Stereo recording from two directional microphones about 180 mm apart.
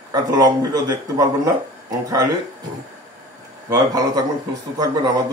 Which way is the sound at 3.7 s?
20° right (ahead or behind).